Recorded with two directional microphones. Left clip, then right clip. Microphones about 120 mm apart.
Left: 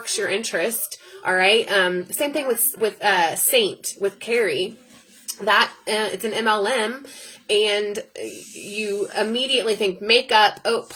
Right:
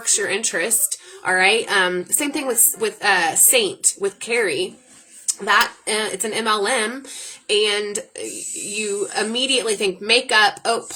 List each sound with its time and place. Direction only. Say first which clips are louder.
0.2 s a woman's voice: right 1 dB; 20° right (ahead or behind)